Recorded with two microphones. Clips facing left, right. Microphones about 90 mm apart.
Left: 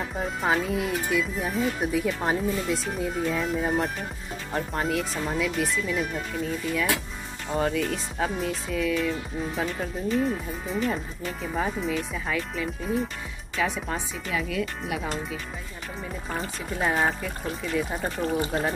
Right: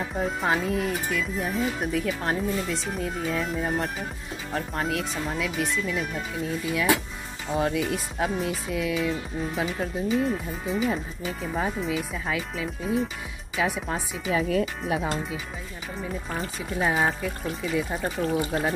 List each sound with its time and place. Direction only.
0.2 s speech: centre (ahead or behind)
7.4 s speech: 5° right (ahead or behind)
14.3 s speech: 40° right (ahead or behind)
15.0 s speech: 5° right (ahead or behind)